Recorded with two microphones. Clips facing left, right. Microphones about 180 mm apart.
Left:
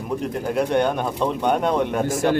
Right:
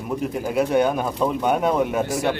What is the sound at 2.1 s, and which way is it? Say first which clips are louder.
Speech: left 3 dB; 45° left (ahead or behind).